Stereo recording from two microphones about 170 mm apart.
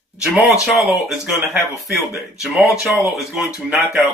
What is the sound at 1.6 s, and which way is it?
Speech, 15° left (ahead or behind).